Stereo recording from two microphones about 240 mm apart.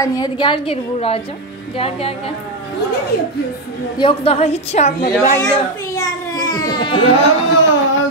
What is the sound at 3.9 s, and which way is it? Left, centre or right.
A child's voice, left.